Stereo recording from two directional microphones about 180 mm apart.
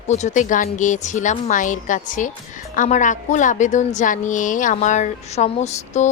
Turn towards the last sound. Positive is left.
turn(degrees=40)  # may be behind; listen again after turning